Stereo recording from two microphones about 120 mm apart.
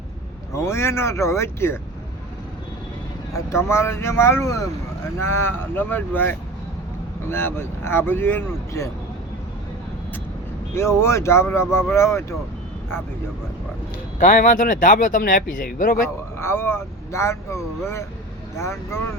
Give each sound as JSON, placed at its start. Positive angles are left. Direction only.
{"t": 0.5, "sound": "speech", "side_deg": 20}
{"t": 3.3, "sound": "speech", "side_deg": 25}
{"t": 10.8, "sound": "speech", "side_deg": 20}
{"t": 14.2, "sound": "speech", "side_deg": 90}
{"t": 16.4, "sound": "speech", "side_deg": 20}